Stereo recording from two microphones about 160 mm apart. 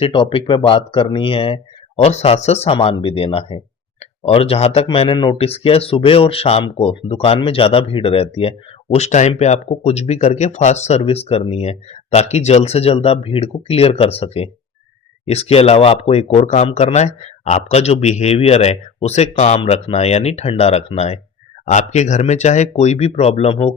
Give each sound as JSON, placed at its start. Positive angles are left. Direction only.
{"t": 0.0, "sound": "speech", "side_deg": 30}